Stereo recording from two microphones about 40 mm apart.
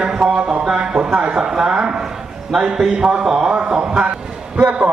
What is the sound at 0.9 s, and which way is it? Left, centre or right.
A man's voice, right.